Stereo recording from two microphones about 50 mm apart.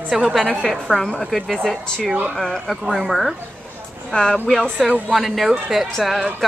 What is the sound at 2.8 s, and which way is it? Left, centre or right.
Speech, centre.